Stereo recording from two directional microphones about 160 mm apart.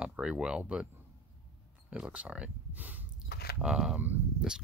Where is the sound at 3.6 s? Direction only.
5° right (ahead or behind).